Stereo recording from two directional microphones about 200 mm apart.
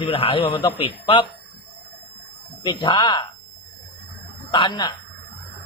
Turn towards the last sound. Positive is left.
turn(degrees=20)  # may be behind; listen again after turning